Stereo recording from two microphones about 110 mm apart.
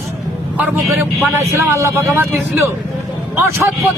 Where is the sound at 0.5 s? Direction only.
15° right (ahead or behind).